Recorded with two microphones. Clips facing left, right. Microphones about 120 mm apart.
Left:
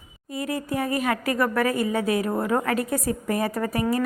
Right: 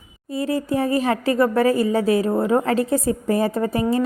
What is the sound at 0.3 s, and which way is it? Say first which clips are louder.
A woman's voice: right 6 dB; 30° right (ahead or behind).